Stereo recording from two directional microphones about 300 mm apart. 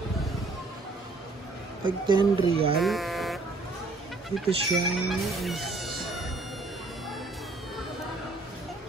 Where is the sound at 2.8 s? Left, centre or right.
Centre.